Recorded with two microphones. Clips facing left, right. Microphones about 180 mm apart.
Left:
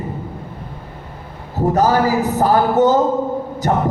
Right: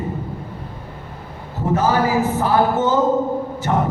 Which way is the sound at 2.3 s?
40° left (ahead or behind).